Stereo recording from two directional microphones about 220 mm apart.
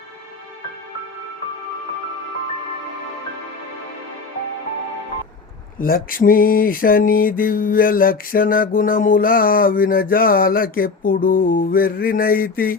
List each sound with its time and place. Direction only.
5.8 s mantra: 40° left (ahead or behind)